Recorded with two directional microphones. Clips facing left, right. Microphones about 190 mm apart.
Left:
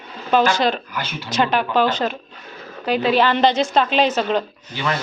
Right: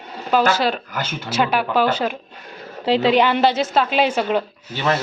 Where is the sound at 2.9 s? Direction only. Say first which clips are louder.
Right 2 dB; 25° right (ahead or behind).